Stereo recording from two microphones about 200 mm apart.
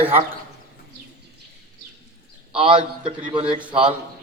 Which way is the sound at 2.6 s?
25° right (ahead or behind).